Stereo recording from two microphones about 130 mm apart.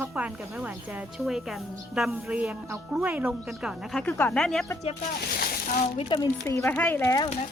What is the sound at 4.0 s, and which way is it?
Speech, 15° left (ahead or behind).